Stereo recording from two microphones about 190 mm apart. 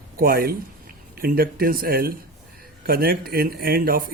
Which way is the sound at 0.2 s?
50° right (ahead or behind).